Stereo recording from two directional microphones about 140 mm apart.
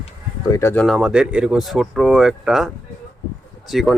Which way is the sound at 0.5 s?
15° left (ahead or behind).